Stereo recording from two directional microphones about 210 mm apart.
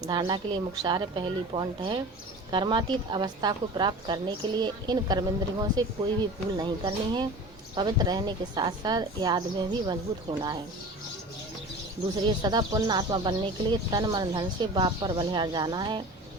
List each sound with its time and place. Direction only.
0.0 s speech: 20° right (ahead or behind)
12.2 s speech: 20° right (ahead or behind)